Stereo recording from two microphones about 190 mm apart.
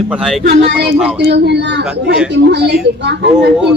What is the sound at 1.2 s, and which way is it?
Speech, 60° right (ahead or behind).